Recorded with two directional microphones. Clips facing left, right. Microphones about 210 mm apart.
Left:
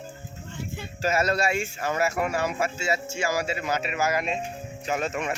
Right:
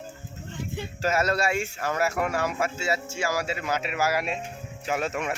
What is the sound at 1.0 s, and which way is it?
Speech, 10° left (ahead or behind).